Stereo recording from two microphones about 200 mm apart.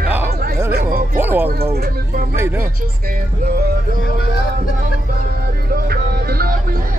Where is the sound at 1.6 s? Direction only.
30° right (ahead or behind).